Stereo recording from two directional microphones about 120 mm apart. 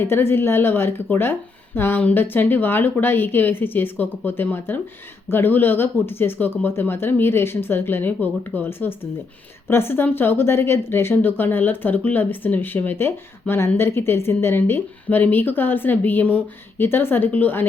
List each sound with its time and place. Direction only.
0.0 s speech: 20° left (ahead or behind)